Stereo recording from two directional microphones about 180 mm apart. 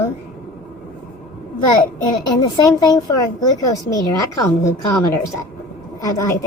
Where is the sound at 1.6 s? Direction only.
25° left (ahead or behind).